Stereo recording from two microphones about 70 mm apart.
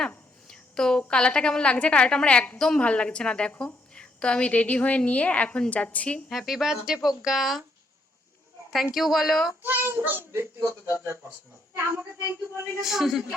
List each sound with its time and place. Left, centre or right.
0.1 s a sound: centre
1.1 s a woman's voice: centre
6.2 s speech: centre
8.7 s speech: centre
9.6 s a child's voice: right
11.8 s a child's voice: right
12.8 s speech: centre